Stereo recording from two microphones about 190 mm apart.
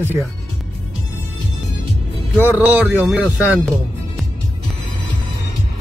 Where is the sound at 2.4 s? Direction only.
10° right (ahead or behind).